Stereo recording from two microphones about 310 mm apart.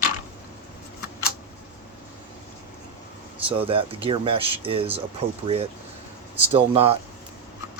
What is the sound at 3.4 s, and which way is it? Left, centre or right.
Speech, centre.